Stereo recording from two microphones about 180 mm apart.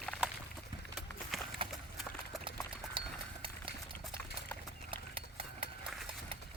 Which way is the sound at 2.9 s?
30° right (ahead or behind).